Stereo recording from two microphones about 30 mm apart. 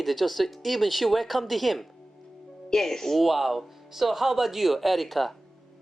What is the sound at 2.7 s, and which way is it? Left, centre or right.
Speech, centre.